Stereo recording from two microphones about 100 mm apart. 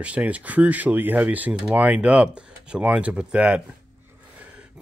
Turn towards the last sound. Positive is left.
turn(degrees=-10)  # may be behind; listen again after turning